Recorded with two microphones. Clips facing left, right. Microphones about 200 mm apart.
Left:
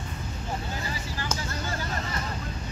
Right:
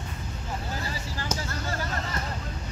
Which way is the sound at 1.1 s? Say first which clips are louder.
Right 2 dB; 30° right (ahead or behind).